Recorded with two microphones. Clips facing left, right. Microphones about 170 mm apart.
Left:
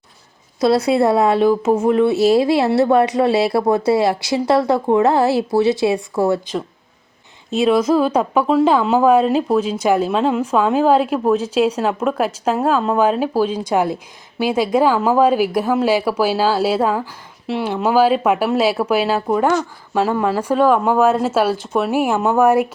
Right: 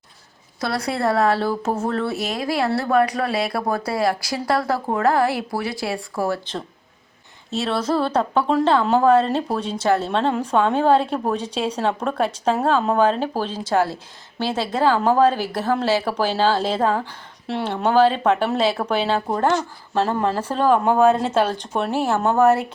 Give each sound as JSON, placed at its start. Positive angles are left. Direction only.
{"t": 0.6, "sound": "speech", "side_deg": 20}
{"t": 2.1, "sound": "speech", "side_deg": 30}
{"t": 7.5, "sound": "speech", "side_deg": 15}